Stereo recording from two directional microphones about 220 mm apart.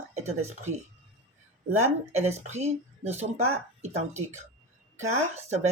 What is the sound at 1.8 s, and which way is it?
Speech, 30° right (ahead or behind).